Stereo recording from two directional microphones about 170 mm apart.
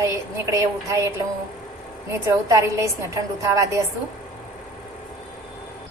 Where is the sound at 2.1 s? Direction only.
20° right (ahead or behind).